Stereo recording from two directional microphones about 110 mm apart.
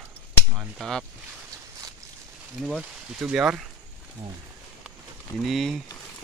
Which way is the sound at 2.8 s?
10° right (ahead or behind).